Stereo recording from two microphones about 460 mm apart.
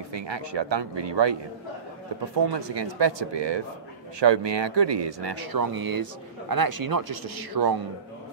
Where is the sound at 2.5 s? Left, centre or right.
Right.